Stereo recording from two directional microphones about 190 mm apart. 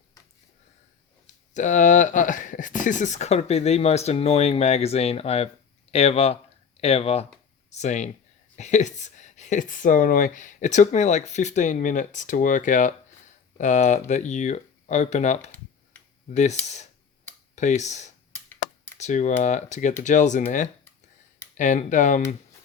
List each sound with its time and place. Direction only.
1.5 s speech: 40° left (ahead or behind)
18.3 s a sound: 10° left (ahead or behind)
18.9 s speech: 40° left (ahead or behind)
21.6 s speech: 40° left (ahead or behind)